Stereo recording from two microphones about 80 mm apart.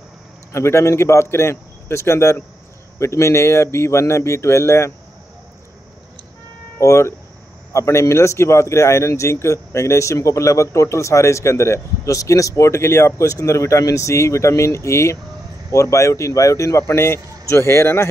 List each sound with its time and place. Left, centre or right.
0.5 s a man's voice: left
6.8 s a man's voice: left